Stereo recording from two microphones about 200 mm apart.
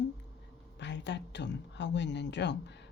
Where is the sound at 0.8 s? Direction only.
60° left (ahead or behind).